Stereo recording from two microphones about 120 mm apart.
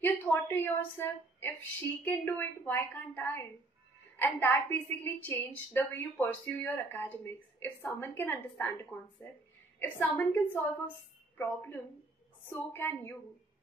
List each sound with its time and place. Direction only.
0.0 s a woman's voice: 15° left (ahead or behind)